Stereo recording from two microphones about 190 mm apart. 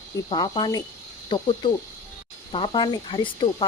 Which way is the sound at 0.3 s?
25° left (ahead or behind).